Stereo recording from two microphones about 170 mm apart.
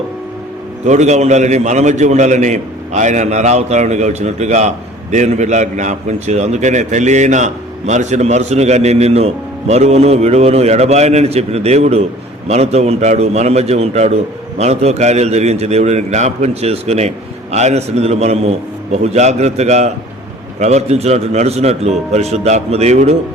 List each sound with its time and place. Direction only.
0.9 s a man's voice: 45° right (ahead or behind)